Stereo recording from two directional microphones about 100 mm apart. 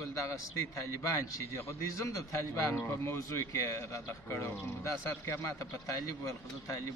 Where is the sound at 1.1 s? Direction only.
30° left (ahead or behind).